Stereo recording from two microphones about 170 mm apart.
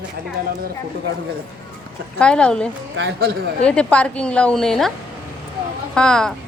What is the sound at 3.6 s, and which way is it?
A woman's voice, 5° left (ahead or behind).